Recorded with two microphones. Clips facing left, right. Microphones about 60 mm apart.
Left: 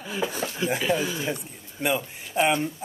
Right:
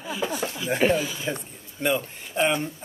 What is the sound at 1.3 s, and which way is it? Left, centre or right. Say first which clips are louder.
A man's voice: even; centre.